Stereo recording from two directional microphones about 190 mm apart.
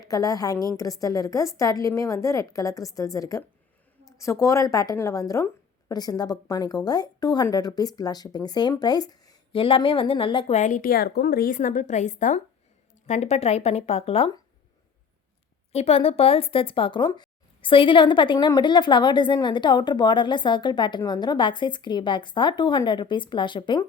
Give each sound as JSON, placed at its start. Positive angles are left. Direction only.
{"t": 0.0, "sound": "a woman's voice", "side_deg": 20}
{"t": 10.6, "sound": "a woman's voice", "side_deg": 45}
{"t": 15.7, "sound": "speech", "side_deg": 30}